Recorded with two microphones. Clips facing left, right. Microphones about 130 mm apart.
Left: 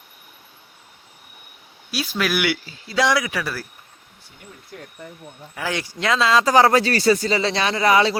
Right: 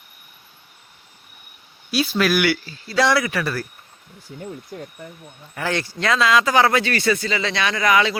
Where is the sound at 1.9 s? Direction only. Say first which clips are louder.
Right 4 dB; 5° left (ahead or behind).